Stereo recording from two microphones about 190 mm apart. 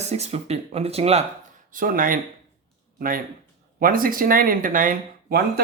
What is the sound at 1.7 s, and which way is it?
Speech, 45° right (ahead or behind).